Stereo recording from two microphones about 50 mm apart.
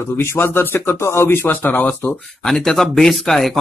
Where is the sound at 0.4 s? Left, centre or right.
Left.